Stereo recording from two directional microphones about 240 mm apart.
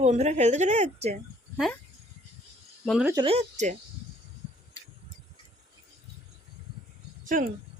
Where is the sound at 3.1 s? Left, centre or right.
Right.